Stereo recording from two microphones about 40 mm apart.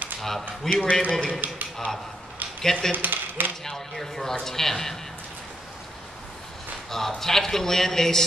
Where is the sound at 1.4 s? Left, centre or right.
Right.